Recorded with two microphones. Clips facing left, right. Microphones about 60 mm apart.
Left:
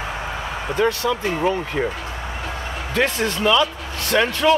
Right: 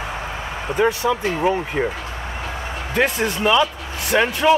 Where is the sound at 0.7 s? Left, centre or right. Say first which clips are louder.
Right 2 dB; centre.